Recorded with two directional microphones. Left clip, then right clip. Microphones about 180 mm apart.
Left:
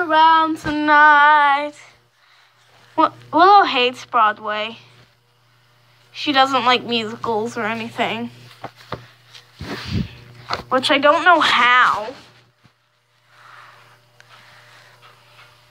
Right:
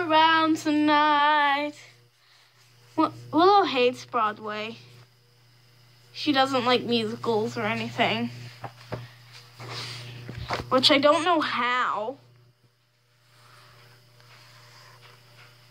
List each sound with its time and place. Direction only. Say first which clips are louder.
0.0 s female singing: left 7 dB; 5° left (ahead or behind)
0.4 s female singing: left 4 dB; 5° right (ahead or behind)
2.9 s speech: left 8 dB; centre (ahead or behind)
6.1 s speech: left 7 dB; centre (ahead or behind)
7.3 s a woman's voice: left 5 dB; 20° left (ahead or behind); by 8.5 s centre (ahead or behind)
9.8 s female singing: left 7 dB; 10° right (ahead or behind)
10.7 s speech: left 5 dB; centre (ahead or behind)
11.6 s female singing: left 12 dB; 15° right (ahead or behind)